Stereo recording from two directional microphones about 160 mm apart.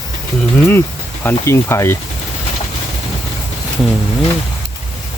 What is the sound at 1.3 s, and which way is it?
Speech, 15° left (ahead or behind).